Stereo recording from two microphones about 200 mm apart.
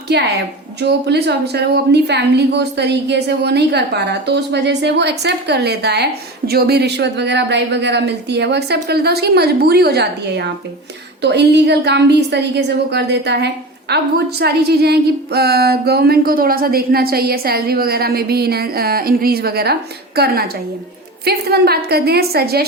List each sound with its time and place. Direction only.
0.1 s a woman's voice: 55° right (ahead or behind)